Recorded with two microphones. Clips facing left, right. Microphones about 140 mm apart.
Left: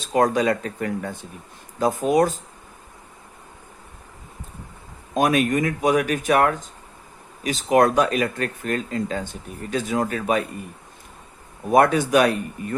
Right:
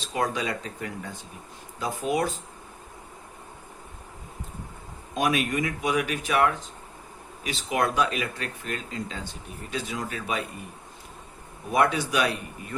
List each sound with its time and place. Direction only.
0.1 s speech: 45° left (ahead or behind)
5.1 s speech: 45° left (ahead or behind)
11.7 s speech: 50° left (ahead or behind)